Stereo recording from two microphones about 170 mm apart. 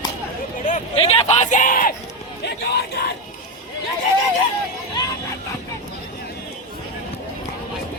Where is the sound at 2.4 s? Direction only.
75° left (ahead or behind).